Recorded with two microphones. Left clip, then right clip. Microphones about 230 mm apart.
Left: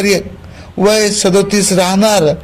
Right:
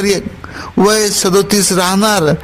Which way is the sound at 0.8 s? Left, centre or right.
Right.